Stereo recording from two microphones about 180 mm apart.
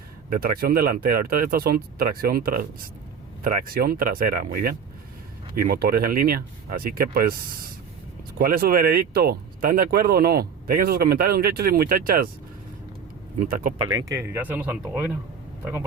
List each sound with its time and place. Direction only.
0.3 s speech: 55° right (ahead or behind)
13.4 s speech: 45° right (ahead or behind)
13.9 s speech: 20° right (ahead or behind)